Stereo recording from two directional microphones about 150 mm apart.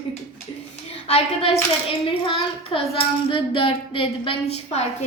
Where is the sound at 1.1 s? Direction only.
45° left (ahead or behind).